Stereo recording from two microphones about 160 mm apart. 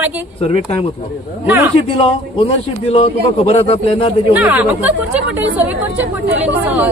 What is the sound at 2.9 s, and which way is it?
A man's voice, 40° left (ahead or behind).